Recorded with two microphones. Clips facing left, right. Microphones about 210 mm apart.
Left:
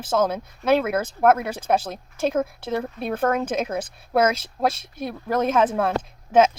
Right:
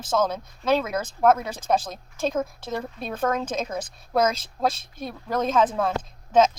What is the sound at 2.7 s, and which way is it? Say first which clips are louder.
Speech: left 6 dB; 60° left (ahead or behind).